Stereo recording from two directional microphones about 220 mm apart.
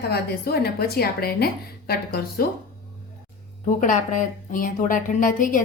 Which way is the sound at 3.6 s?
35° left (ahead or behind).